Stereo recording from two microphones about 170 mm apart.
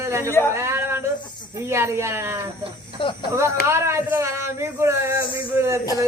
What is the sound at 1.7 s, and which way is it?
Speech, 15° right (ahead or behind).